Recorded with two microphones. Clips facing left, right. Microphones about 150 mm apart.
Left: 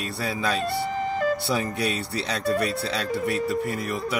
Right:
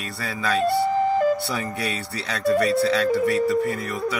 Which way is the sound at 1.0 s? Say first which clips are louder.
Right 3 dB; 45° right (ahead or behind).